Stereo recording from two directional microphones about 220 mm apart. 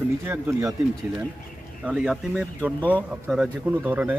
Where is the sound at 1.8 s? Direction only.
5° right (ahead or behind).